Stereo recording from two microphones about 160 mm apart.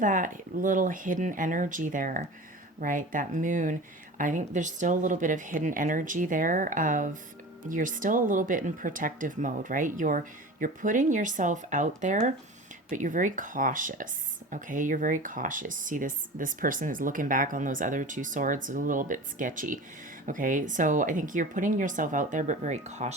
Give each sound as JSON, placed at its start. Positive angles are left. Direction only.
{"t": 0.0, "sound": "speech", "side_deg": -55}